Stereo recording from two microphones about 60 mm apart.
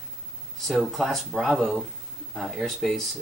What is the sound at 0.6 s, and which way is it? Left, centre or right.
Speech, centre.